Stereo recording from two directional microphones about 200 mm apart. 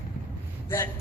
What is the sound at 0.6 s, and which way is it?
Speech, 15° left (ahead or behind).